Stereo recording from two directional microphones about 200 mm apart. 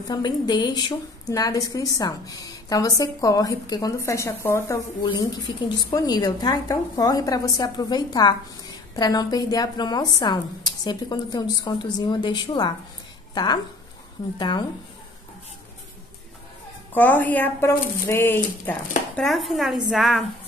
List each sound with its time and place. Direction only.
0.1 s a woman's voice: 20° left (ahead or behind)
5.8 s a woman's voice: 20° left (ahead or behind)
16.9 s a woman's voice: 10° left (ahead or behind)